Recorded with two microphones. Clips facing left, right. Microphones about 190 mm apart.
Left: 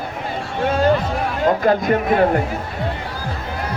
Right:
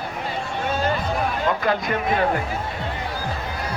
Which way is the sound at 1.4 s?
45° left (ahead or behind).